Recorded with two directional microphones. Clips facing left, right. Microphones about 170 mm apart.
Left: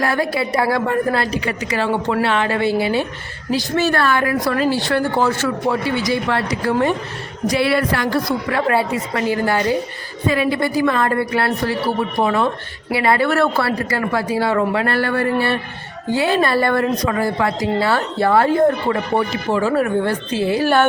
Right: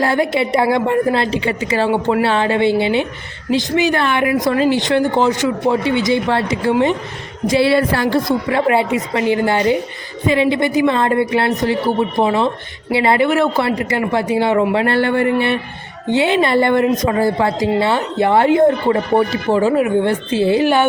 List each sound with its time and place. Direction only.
0.0 s a woman's voice: 25° right (ahead or behind)